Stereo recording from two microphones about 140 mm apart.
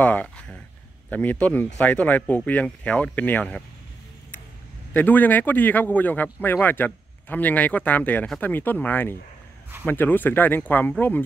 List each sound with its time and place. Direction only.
0.0 s speech: 10° left (ahead or behind)
4.9 s speech: 10° left (ahead or behind)